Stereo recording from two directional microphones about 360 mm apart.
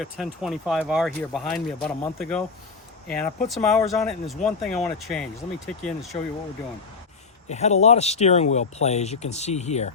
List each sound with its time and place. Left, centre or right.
0.0 s speech: centre
7.4 s speech: centre